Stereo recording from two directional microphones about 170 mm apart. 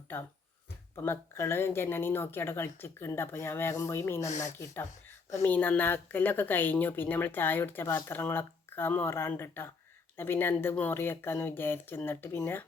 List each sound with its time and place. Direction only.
0.9 s speech: 15° left (ahead or behind)
4.3 s speech: 45° left (ahead or behind)
4.6 s speech: 15° left (ahead or behind)